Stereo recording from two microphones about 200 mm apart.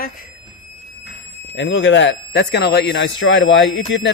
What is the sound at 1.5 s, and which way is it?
Speech, 65° left (ahead or behind).